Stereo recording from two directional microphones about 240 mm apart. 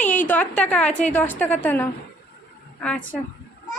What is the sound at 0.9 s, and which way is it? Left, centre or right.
Speech, left.